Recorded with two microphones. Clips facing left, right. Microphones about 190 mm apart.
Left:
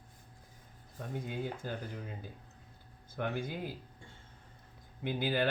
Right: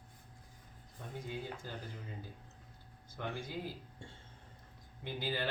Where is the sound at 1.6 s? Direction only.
55° left (ahead or behind).